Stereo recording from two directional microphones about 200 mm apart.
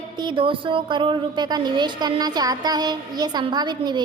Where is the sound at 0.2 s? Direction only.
25° right (ahead or behind).